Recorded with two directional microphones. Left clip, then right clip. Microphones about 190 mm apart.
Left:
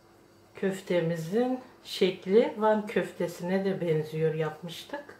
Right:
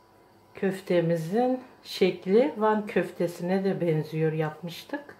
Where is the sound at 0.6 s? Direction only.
35° right (ahead or behind).